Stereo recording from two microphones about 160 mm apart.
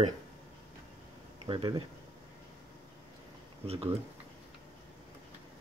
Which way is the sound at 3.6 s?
40° right (ahead or behind).